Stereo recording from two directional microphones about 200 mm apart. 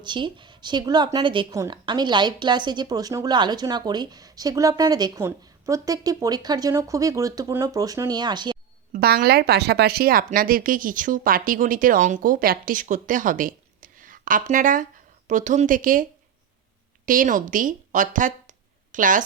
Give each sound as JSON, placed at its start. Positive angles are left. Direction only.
{"t": 0.0, "sound": "a woman's voice", "side_deg": -25}
{"t": 8.9, "sound": "speech", "side_deg": -50}
{"t": 17.1, "sound": "speech", "side_deg": -40}